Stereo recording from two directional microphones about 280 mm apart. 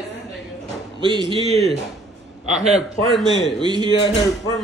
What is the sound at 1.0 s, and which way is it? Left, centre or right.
Speech, centre.